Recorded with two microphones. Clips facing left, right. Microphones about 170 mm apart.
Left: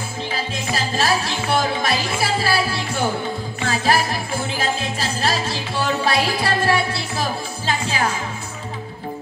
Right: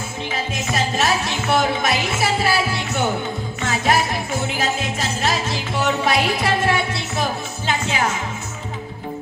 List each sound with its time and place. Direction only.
0.3 s music: 30° left (ahead or behind)
1.8 s speech: 30° left (ahead or behind)
3.6 s music: 30° left (ahead or behind)